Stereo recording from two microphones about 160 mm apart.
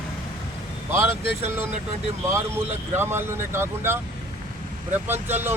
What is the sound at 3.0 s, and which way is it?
Speech, 15° right (ahead or behind).